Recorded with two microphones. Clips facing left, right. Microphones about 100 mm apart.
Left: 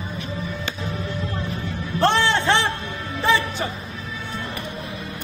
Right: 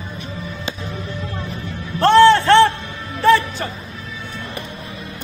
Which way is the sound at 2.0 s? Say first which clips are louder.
Right 9 dB; 15° left (ahead or behind).